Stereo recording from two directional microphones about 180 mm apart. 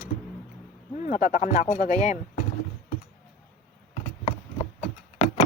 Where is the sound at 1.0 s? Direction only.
45° left (ahead or behind).